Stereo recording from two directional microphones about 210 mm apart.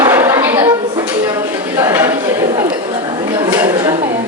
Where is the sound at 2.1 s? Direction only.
15° right (ahead or behind).